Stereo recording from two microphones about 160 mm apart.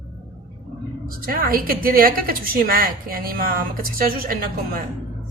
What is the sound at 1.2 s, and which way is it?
A woman's voice, 65° right (ahead or behind).